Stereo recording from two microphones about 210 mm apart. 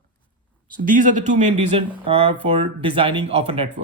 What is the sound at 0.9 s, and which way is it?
Speech, 35° right (ahead or behind).